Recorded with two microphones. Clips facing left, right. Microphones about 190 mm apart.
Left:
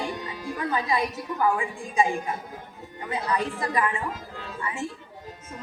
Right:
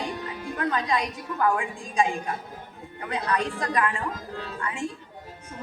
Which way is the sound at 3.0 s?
5° left (ahead or behind).